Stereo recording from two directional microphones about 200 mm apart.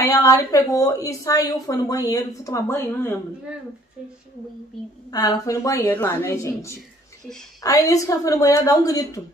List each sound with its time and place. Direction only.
0.0 s a woman's voice: 15° left (ahead or behind)
5.1 s a woman's voice: 15° left (ahead or behind)